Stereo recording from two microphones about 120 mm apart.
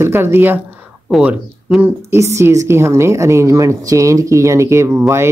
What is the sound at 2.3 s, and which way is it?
Speech, 25° right (ahead or behind).